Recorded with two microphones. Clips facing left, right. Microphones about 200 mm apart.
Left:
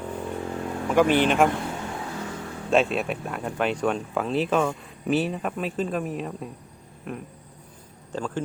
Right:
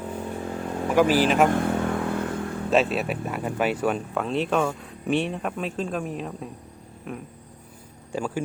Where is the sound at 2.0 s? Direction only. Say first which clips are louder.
Right 6 dB; 55° right (ahead or behind).